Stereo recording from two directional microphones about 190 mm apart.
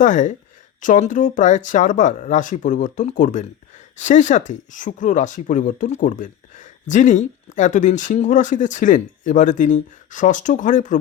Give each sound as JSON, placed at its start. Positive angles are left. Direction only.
{"t": 0.0, "sound": "speech", "side_deg": 40}